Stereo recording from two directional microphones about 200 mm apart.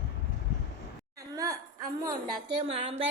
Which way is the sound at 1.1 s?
15° right (ahead or behind).